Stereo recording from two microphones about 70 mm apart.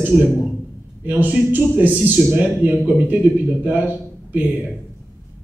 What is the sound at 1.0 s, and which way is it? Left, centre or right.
A man's voice, right.